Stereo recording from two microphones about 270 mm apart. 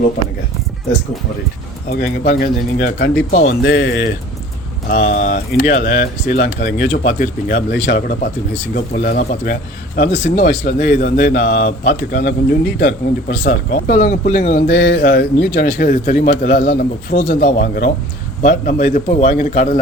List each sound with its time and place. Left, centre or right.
1.9 s speech: left